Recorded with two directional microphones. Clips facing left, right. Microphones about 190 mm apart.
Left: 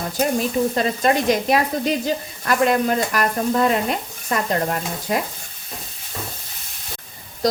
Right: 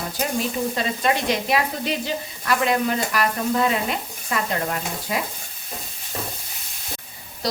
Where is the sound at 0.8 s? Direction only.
45° left (ahead or behind).